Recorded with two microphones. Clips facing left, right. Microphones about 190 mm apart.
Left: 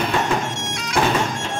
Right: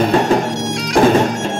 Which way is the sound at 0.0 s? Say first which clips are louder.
Right 8 dB; 40° right (ahead or behind).